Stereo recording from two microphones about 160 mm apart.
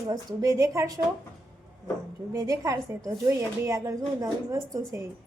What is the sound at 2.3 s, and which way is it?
Speech, 20° right (ahead or behind).